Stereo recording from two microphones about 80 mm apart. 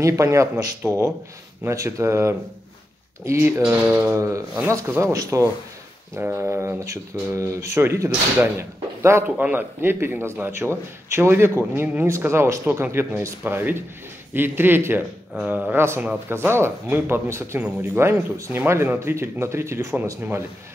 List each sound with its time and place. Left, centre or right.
0.0 s speech: right
6.1 s a man's voice: right